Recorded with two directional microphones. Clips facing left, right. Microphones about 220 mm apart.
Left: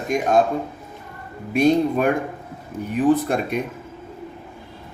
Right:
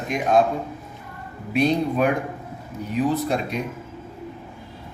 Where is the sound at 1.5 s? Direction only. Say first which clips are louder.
Left 3 dB; 45° left (ahead or behind).